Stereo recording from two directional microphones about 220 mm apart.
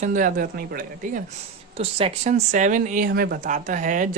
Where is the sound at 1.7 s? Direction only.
25° right (ahead or behind).